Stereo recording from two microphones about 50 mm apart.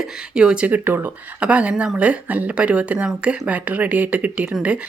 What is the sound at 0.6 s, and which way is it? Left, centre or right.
Speech, right.